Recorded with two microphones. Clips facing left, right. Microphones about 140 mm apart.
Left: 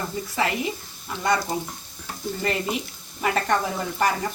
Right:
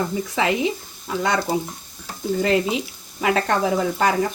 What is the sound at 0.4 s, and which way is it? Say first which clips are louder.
Speech: right 4 dB; 90° right.